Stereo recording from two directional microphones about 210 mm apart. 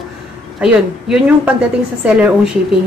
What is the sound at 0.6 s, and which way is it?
Speech, 5° right (ahead or behind).